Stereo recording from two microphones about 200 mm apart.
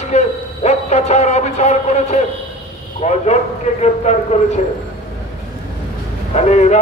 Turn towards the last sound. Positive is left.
turn(degrees=35)  # may be behind; listen again after turning